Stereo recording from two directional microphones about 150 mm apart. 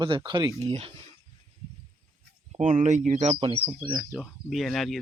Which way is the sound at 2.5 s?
50° right (ahead or behind).